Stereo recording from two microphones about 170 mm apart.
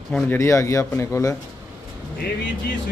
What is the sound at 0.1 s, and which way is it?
Speech, 5° left (ahead or behind).